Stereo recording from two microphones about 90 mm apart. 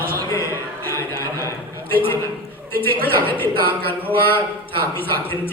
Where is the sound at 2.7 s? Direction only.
25° left (ahead or behind).